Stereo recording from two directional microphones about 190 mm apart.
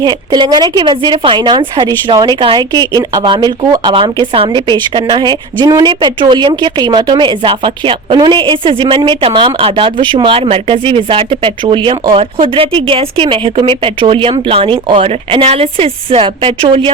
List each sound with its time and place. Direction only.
0.0 s speech: 20° right (ahead or behind)